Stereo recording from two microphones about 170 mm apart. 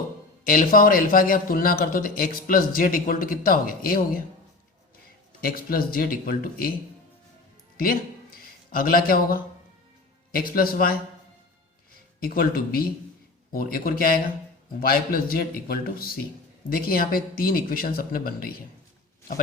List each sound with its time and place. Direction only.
0.4 s a man's voice: 55° left (ahead or behind)
5.4 s a man's voice: 60° left (ahead or behind)
7.8 s a sound: 55° left (ahead or behind)
10.5 s a man's voice: 60° left (ahead or behind)
12.2 s a man's voice: 60° left (ahead or behind)